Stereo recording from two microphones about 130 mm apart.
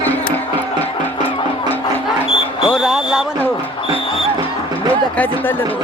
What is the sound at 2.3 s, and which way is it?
Music, 45° left (ahead or behind).